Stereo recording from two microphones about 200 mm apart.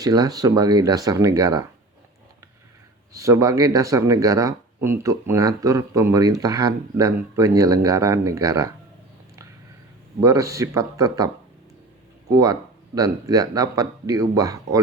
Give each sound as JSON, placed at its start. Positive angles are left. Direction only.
{"t": 0.0, "sound": "speech", "side_deg": -20}
{"t": 3.1, "sound": "speech", "side_deg": -15}
{"t": 10.2, "sound": "speech", "side_deg": -15}
{"t": 12.3, "sound": "speech", "side_deg": -20}